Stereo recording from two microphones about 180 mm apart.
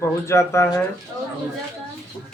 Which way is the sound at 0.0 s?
15° left (ahead or behind).